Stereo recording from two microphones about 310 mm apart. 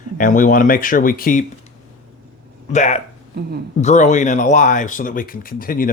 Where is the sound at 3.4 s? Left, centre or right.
Right.